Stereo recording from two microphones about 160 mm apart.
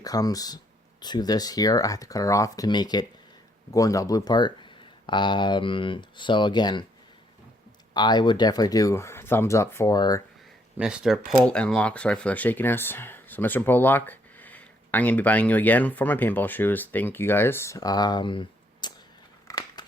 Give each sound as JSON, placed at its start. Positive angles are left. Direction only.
{"t": 0.0, "sound": "speech", "side_deg": 25}
{"t": 7.9, "sound": "speech", "side_deg": 25}
{"t": 10.8, "sound": "speech", "side_deg": -5}
{"t": 11.3, "sound": "speech", "side_deg": 5}
{"t": 19.5, "sound": "a sound", "side_deg": 25}